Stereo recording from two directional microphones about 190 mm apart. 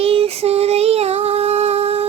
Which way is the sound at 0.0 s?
30° right (ahead or behind).